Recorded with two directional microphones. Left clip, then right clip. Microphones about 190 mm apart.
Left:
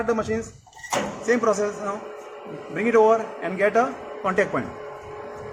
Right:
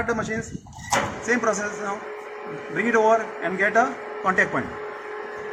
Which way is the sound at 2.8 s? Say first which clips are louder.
Left 1 dB; 25° left (ahead or behind).